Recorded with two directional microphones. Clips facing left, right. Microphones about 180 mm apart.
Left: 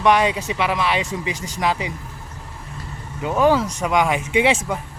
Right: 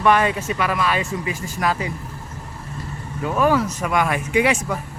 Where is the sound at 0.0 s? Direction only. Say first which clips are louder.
Even; 15° left (ahead or behind).